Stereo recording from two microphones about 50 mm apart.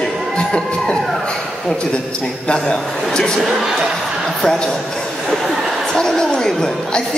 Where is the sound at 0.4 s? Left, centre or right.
Centre.